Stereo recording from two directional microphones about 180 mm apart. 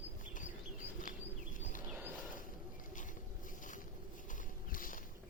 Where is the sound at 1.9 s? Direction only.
10° right (ahead or behind).